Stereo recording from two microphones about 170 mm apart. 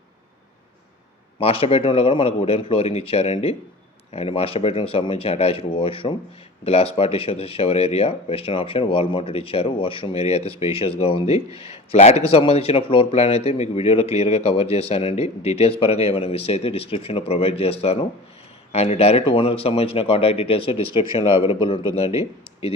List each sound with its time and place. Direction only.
1.4 s speech: 35° left (ahead or behind)